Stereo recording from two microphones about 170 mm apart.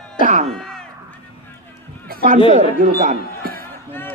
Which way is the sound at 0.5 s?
5° left (ahead or behind).